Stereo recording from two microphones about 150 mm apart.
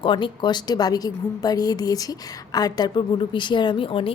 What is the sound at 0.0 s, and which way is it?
A woman's voice, 35° left (ahead or behind).